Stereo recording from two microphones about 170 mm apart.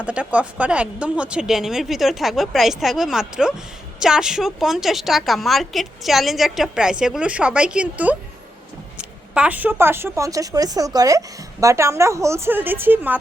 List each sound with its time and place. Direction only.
0.0 s a woman's voice: 5° right (ahead or behind)